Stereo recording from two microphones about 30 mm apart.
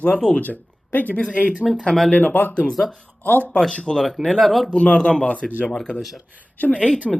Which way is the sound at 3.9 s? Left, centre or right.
Left.